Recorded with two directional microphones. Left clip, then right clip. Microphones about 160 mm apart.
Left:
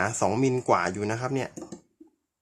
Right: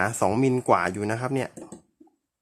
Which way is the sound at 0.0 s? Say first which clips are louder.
Right 2 dB; 35° right (ahead or behind).